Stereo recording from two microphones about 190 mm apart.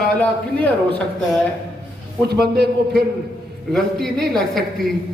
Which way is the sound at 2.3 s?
60° right (ahead or behind).